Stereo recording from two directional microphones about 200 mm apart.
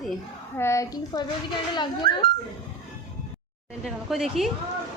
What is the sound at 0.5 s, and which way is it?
A woman's voice, 15° left (ahead or behind).